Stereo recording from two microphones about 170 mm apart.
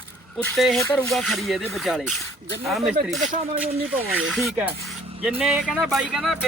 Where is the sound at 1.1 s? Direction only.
Centre (ahead or behind).